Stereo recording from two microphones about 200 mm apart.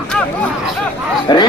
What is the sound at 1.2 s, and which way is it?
Speech, 20° left (ahead or behind).